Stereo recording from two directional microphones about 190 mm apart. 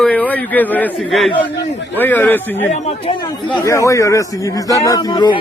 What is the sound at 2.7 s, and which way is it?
Speech, 30° left (ahead or behind).